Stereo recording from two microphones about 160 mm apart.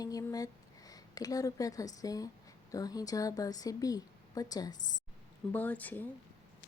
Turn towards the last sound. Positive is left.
turn(degrees=10)  # may be behind; listen again after turning